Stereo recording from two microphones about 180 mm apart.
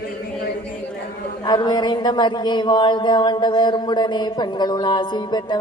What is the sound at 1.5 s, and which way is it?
Speech, 25° left (ahead or behind).